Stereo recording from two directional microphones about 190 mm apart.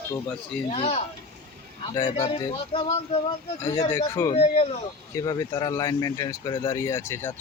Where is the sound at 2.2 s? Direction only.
25° left (ahead or behind).